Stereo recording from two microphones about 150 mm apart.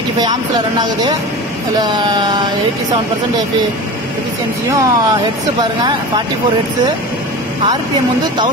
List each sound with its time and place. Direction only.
0.2 s speech: 25° right (ahead or behind)
4.7 s speech: 25° right (ahead or behind)
7.7 s speech: 25° right (ahead or behind)